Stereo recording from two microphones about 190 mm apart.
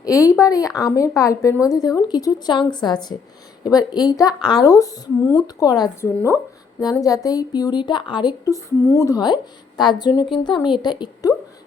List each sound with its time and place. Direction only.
0.0 s a woman's voice: 15° left (ahead or behind)